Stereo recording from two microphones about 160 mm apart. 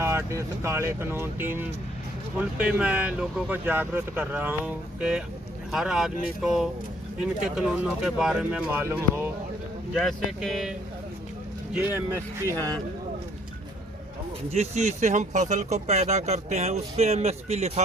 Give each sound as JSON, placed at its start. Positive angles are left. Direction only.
{"t": 0.0, "sound": "speech", "side_deg": -15}
{"t": 8.8, "sound": "speech", "side_deg": -15}
{"t": 9.9, "sound": "speech", "side_deg": 0}
{"t": 11.9, "sound": "speech", "side_deg": -15}
{"t": 14.5, "sound": "speech", "side_deg": -45}